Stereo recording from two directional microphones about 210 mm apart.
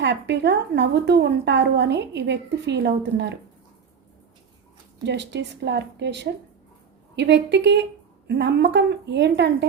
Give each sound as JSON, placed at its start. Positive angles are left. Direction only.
{"t": 0.0, "sound": "a woman's voice", "side_deg": -55}
{"t": 5.0, "sound": "a woman's voice", "side_deg": -55}